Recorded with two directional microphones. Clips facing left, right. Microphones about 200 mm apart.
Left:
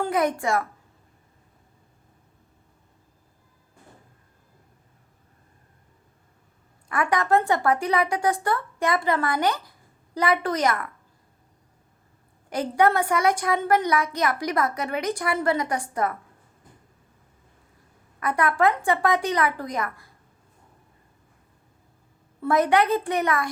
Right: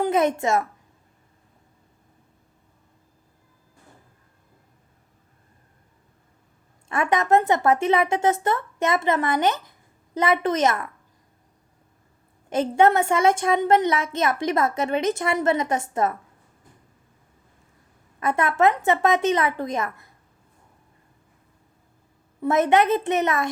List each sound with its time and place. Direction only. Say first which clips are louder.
0.0 s a woman's voice: right 3 dB; 25° right (ahead or behind)
6.8 s a woman's voice: right 2 dB; 25° right (ahead or behind)
12.5 s a woman's voice: right 3 dB; 25° right (ahead or behind)
18.2 s a woman's voice: right 2 dB; 25° right (ahead or behind)
22.4 s a woman's voice: right 2 dB; 20° right (ahead or behind)